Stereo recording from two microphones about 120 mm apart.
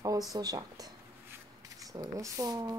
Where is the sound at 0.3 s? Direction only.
30° right (ahead or behind).